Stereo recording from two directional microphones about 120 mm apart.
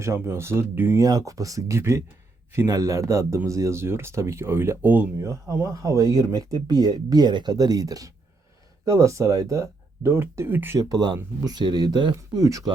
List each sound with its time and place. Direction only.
0.0 s speech: 25° right (ahead or behind)
1.0 s speech: 30° right (ahead or behind)
10.8 s speech: 30° right (ahead or behind)